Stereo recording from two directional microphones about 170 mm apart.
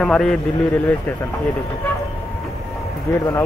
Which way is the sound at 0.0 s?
5° left (ahead or behind).